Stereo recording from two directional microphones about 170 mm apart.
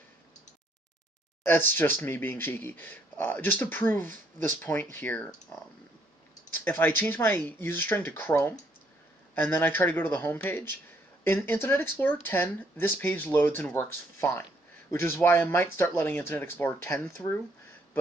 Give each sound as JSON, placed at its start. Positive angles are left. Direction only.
{"t": 1.4, "sound": "speech", "side_deg": 10}